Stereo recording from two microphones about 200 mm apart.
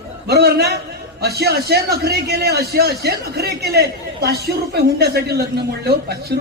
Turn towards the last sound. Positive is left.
turn(degrees=-50)  # may be behind; listen again after turning